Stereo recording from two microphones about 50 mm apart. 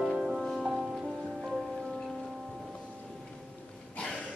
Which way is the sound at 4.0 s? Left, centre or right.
Left.